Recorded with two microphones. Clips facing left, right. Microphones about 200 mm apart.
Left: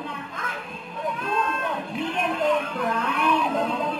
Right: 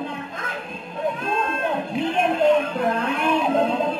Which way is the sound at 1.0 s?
25° right (ahead or behind).